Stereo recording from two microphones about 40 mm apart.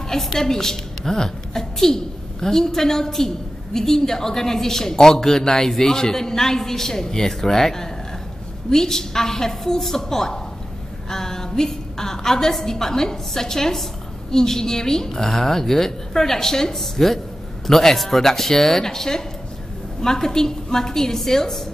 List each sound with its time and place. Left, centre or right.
0.1 s a woman's voice: centre